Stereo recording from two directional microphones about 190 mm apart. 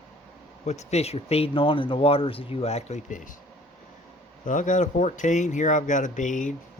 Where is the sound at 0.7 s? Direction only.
35° left (ahead or behind).